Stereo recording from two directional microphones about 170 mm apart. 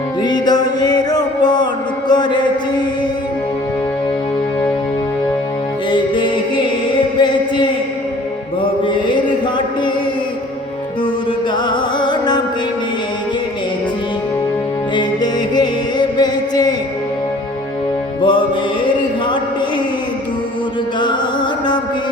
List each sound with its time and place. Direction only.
0.2 s music: 25° left (ahead or behind)
2.0 s mantra: 25° left (ahead or behind)
5.9 s music: 30° left (ahead or behind)
7.2 s chant: 25° left (ahead or behind)
11.5 s music: 25° left (ahead or behind)
14.9 s music: 25° left (ahead or behind)
18.2 s music: 30° left (ahead or behind)